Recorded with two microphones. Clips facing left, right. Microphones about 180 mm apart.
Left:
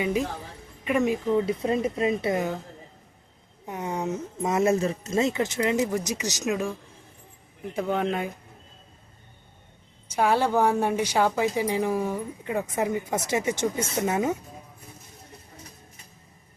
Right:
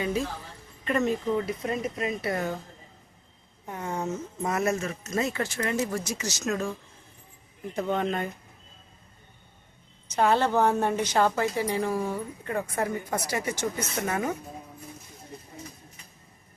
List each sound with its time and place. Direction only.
0.0 s a woman's voice: 15° left (ahead or behind)
1.5 s speech: 30° left (ahead or behind)
3.7 s a woman's voice: 15° left (ahead or behind)
7.7 s a woman's voice: 5° left (ahead or behind)
10.1 s a woman's voice: 10° left (ahead or behind)